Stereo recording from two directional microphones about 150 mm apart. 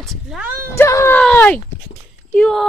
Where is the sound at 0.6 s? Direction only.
20° left (ahead or behind).